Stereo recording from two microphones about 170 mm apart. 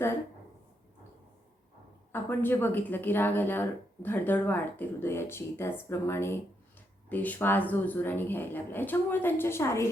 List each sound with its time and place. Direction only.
2.1 s speech: 10° left (ahead or behind)